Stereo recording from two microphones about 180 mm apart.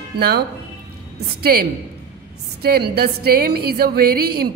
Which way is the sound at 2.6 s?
60° right (ahead or behind).